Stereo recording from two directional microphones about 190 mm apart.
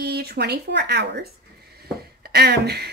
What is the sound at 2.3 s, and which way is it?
Speech, 60° right (ahead or behind).